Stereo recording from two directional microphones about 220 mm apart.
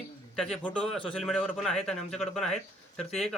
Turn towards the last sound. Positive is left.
turn(degrees=0)  # may be behind; listen again after turning